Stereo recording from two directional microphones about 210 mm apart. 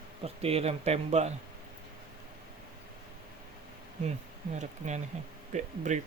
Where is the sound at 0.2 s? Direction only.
30° right (ahead or behind).